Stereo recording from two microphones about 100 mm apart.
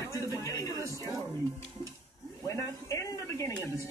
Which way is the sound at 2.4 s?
30° left (ahead or behind).